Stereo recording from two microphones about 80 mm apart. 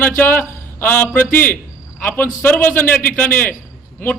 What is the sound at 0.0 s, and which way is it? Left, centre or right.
A man's voice, left.